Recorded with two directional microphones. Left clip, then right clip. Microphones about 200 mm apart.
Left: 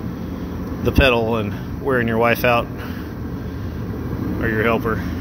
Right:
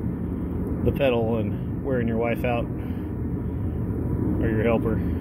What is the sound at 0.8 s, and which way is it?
Speech, 20° left (ahead or behind).